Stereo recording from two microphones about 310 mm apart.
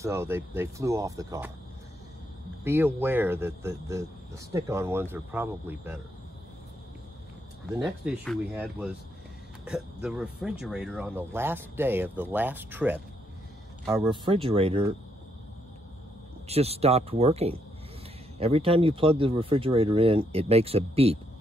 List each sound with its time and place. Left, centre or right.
0.0 s speech: centre
2.6 s speech: centre
7.8 s speech: centre
10.0 s speech: centre
16.4 s speech: centre